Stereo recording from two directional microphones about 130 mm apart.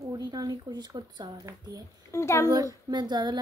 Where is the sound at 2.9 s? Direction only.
35° right (ahead or behind).